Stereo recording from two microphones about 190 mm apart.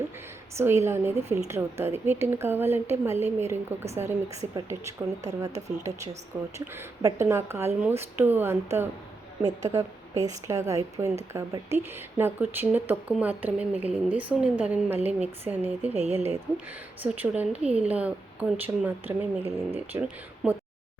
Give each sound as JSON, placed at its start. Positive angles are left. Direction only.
{"t": 0.5, "sound": "speech", "side_deg": -15}
{"t": 5.5, "sound": "speech", "side_deg": -35}
{"t": 6.3, "sound": "speech", "side_deg": -15}
{"t": 10.2, "sound": "speech", "side_deg": -15}
{"t": 16.0, "sound": "speech", "side_deg": -35}
{"t": 17.0, "sound": "speech", "side_deg": -10}